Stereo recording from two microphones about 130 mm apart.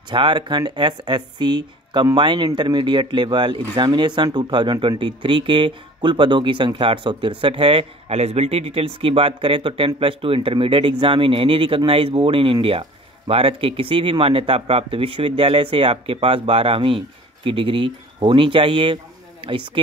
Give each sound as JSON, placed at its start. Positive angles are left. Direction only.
{"t": 0.1, "sound": "speech", "side_deg": -35}